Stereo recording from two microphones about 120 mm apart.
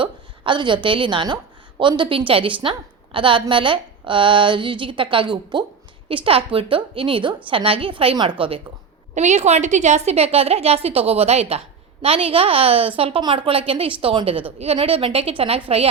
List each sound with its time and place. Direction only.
0.0 s a woman's voice: 40° right (ahead or behind)
9.1 s a woman's voice: 75° right (ahead or behind); by 15.9 s 55° right (ahead or behind)